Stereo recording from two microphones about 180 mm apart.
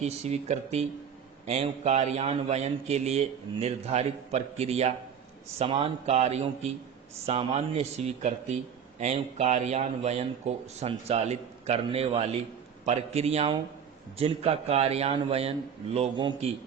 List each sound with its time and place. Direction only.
0.0 s a man's voice: 35° right (ahead or behind)